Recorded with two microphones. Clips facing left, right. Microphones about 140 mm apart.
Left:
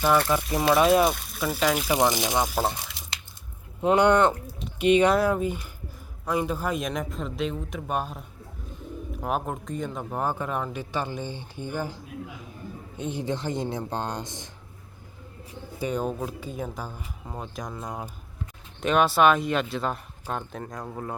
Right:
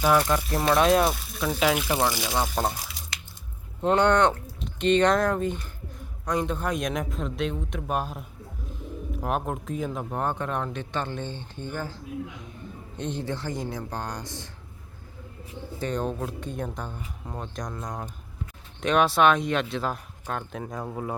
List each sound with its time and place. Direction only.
0.0 s speech: 5° right (ahead or behind)
1.9 s speech: 15° left (ahead or behind)
2.6 s speech: centre (ahead or behind)
3.8 s speech: 10° left (ahead or behind)
13.2 s speech: 20° left (ahead or behind)
15.8 s speech: 10° left (ahead or behind); by 21.2 s 10° right (ahead or behind)